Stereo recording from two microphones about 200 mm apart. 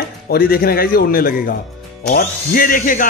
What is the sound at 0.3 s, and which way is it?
Speech, 50° left (ahead or behind).